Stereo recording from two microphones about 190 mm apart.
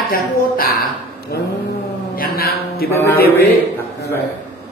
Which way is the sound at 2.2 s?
50° left (ahead or behind).